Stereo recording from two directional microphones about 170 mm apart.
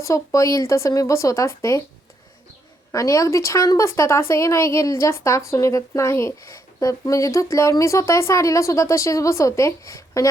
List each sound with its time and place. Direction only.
0.0 s speech: 20° left (ahead or behind)
2.9 s speech: 20° left (ahead or behind)